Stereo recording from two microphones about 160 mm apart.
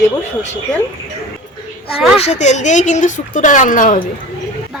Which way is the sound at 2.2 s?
45° left (ahead or behind).